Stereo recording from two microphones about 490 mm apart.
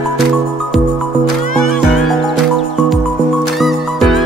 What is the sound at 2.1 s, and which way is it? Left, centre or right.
Music, centre.